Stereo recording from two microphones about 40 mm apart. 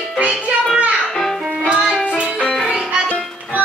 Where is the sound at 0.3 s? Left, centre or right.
Right.